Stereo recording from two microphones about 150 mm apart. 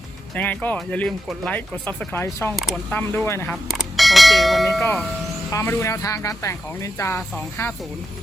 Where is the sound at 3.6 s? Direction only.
Centre (ahead or behind).